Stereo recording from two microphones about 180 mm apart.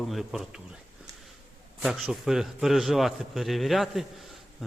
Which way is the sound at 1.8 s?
5° right (ahead or behind).